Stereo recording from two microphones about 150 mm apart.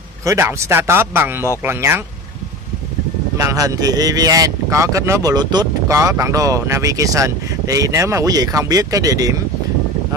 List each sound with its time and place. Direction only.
0.2 s a man's voice: 20° right (ahead or behind)
3.3 s speech: 20° right (ahead or behind)